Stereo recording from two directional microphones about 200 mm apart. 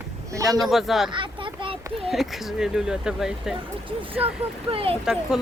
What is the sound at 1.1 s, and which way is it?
Speech, 25° right (ahead or behind).